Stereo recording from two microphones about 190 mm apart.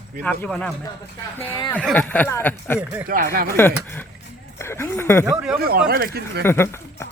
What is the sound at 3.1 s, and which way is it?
Speech, 50° right (ahead or behind).